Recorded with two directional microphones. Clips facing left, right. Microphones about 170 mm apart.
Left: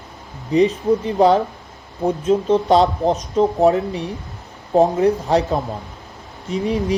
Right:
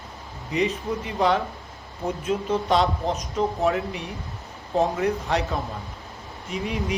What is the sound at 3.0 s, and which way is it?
Speech, 35° left (ahead or behind).